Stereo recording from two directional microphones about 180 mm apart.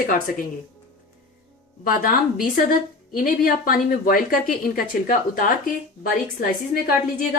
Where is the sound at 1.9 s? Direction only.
55° left (ahead or behind).